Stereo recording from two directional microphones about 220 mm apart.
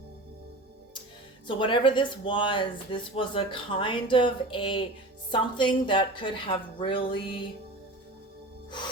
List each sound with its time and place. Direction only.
1.5 s speech: 20° left (ahead or behind)